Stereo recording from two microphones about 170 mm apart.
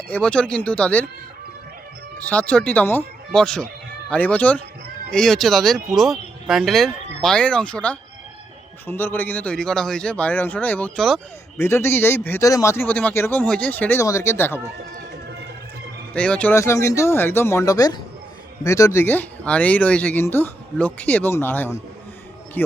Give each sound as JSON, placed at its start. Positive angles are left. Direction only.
{"t": 0.1, "sound": "speech", "side_deg": 5}
{"t": 2.1, "sound": "speech", "side_deg": 10}
{"t": 11.5, "sound": "speech", "side_deg": 15}
{"t": 16.1, "sound": "speech", "side_deg": 5}